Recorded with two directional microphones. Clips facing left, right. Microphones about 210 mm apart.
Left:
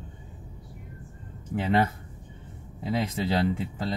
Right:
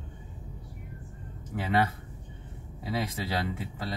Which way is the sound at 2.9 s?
25° left (ahead or behind).